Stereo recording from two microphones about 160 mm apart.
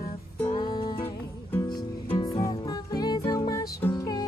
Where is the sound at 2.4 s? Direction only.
25° left (ahead or behind).